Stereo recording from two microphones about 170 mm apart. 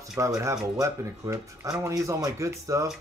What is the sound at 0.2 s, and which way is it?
Speech, 15° right (ahead or behind).